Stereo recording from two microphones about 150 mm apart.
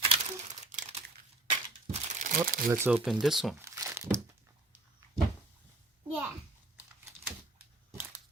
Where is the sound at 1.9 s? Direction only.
55° right (ahead or behind).